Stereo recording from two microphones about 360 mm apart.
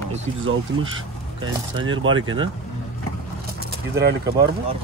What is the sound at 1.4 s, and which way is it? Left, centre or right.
Speech, centre.